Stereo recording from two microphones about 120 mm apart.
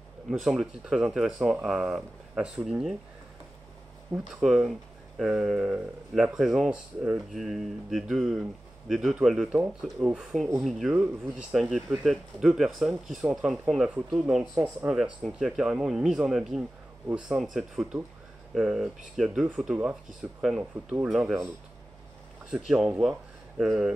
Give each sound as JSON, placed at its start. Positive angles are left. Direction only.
{"t": 0.3, "sound": "speech", "side_deg": -5}
{"t": 4.4, "sound": "speech", "side_deg": 0}
{"t": 14.5, "sound": "speech", "side_deg": -20}
{"t": 14.9, "sound": "speech", "side_deg": -5}
{"t": 22.8, "sound": "speech", "side_deg": -5}